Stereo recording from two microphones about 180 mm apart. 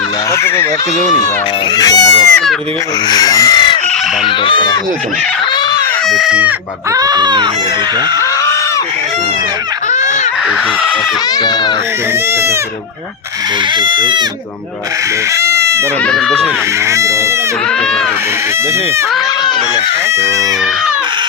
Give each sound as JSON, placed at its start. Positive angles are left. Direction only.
{"t": 0.3, "sound": "speech", "side_deg": 15}
{"t": 1.7, "sound": "speech", "side_deg": 20}
{"t": 6.1, "sound": "speech", "side_deg": 0}
{"t": 6.9, "sound": "speech", "side_deg": -20}
{"t": 11.3, "sound": "speech", "side_deg": 25}
{"t": 12.3, "sound": "speech", "side_deg": -15}
{"t": 13.7, "sound": "speech", "side_deg": -25}
{"t": 15.3, "sound": "speech", "side_deg": -15}
{"t": 16.0, "sound": "speech", "side_deg": 5}
{"t": 16.9, "sound": "speech", "side_deg": -15}